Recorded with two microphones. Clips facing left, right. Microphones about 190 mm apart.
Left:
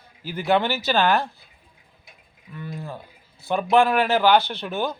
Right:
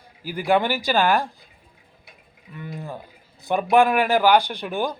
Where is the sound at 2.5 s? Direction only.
15° right (ahead or behind).